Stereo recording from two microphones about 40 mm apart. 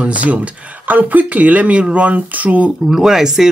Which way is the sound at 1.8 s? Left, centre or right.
Right.